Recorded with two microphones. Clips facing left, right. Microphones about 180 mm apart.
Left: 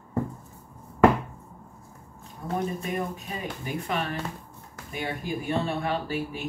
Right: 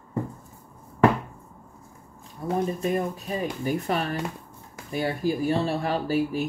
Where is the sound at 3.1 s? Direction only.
40° right (ahead or behind).